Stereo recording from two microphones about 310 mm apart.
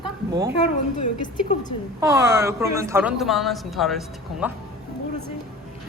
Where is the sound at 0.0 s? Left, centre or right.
Centre.